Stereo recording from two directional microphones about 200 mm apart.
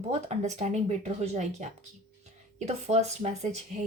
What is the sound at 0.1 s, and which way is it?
Speech, 35° right (ahead or behind).